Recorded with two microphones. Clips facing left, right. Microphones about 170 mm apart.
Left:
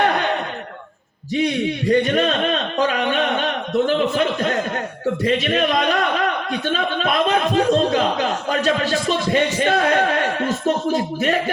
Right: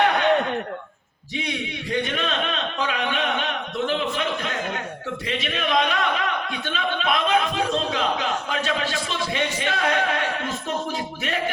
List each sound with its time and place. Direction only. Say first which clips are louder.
1.9 s a man's voice: left 8 dB; 45° left (ahead or behind)